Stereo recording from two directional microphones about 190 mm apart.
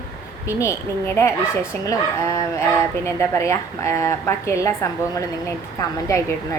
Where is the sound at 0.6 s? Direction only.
15° left (ahead or behind).